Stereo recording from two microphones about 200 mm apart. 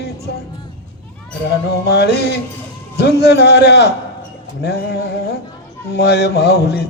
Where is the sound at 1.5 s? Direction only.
55° left (ahead or behind).